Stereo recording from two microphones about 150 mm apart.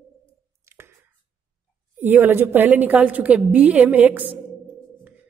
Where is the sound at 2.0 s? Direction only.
15° right (ahead or behind).